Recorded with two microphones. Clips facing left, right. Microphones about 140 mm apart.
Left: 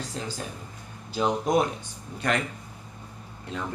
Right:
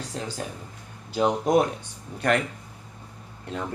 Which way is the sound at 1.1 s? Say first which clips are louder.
Right 3 dB; 60° right (ahead or behind).